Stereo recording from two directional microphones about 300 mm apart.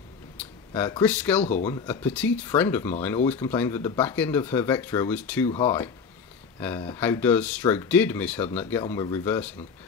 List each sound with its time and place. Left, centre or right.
0.4 s speech: centre
1.4 s speech: left
1.7 s speech: centre
6.6 s speech: centre